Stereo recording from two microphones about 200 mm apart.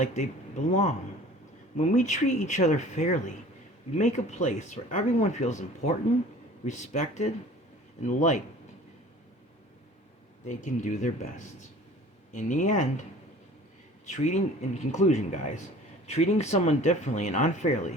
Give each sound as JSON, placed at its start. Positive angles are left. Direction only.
{"t": 0.0, "sound": "speech", "side_deg": 35}
{"t": 10.5, "sound": "speech", "side_deg": 40}
{"t": 14.0, "sound": "speech", "side_deg": 35}